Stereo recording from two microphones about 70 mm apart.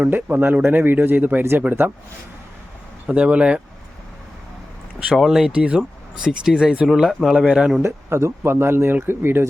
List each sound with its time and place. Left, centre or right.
0.0 s speech: right
3.1 s speech: centre
5.1 s speech: centre
5.5 s speech: centre
7.3 s speech: centre
7.8 s speech: right